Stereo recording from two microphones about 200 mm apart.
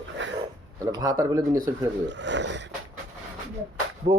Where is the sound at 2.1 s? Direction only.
65° right (ahead or behind).